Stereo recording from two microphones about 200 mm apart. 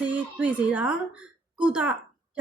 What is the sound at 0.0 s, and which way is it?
A child's voice, 5° right (ahead or behind).